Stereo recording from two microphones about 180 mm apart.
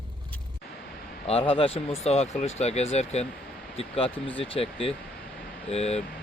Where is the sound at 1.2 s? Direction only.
35° left (ahead or behind).